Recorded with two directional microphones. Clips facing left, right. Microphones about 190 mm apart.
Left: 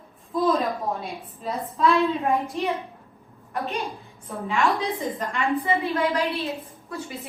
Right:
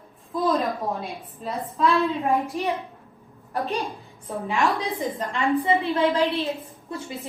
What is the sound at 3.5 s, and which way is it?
Speech, 35° right (ahead or behind).